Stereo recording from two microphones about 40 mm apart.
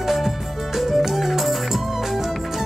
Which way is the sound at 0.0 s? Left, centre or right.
Centre.